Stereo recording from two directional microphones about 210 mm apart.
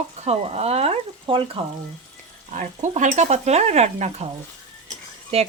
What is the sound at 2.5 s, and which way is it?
Speech, 35° right (ahead or behind).